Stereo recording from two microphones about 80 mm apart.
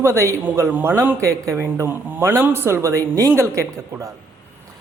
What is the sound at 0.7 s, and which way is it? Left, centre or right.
A man's voice, right.